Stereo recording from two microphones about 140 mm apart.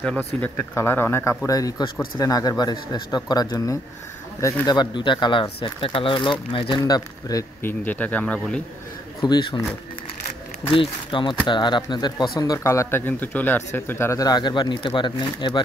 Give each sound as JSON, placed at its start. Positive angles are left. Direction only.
{"t": 0.4, "sound": "speech", "side_deg": 15}
{"t": 6.8, "sound": "speech", "side_deg": 25}
{"t": 7.6, "sound": "speech", "side_deg": 10}
{"t": 9.2, "sound": "speech", "side_deg": 35}
{"t": 10.7, "sound": "speech", "side_deg": 35}